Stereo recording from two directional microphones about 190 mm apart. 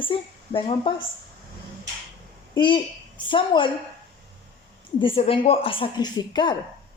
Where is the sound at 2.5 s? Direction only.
25° left (ahead or behind).